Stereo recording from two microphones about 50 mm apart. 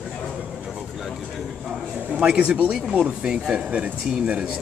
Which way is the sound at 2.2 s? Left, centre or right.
Right.